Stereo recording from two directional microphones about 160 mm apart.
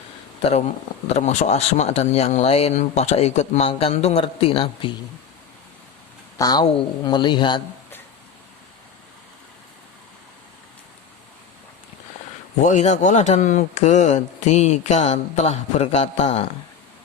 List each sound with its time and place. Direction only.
1.0 s speech: 45° left (ahead or behind)
6.4 s speech: 25° left (ahead or behind)
12.6 s speech: 45° left (ahead or behind)